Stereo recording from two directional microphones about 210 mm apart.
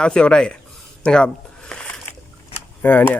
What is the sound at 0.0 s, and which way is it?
Speech, 5° left (ahead or behind).